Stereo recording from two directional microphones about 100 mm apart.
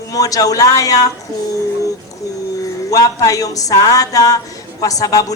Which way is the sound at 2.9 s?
35° left (ahead or behind).